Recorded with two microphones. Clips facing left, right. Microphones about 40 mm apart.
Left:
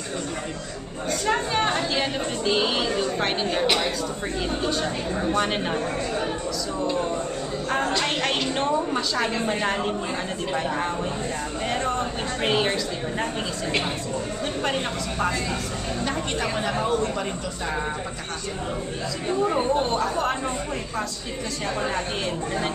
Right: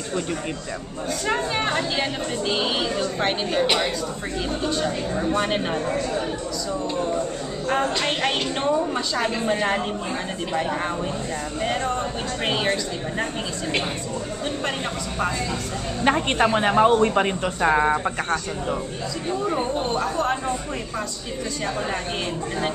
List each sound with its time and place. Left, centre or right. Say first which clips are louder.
1.2 s speech: left 1 dB; centre
7.9 s speech: right 1 dB; centre
12.4 s speech: left 1 dB; centre
16.0 s a woman's voice: right 9 dB; right
19.4 s speech: left 3 dB; centre